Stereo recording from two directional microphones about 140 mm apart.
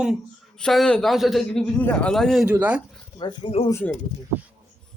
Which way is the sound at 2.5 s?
10° right (ahead or behind).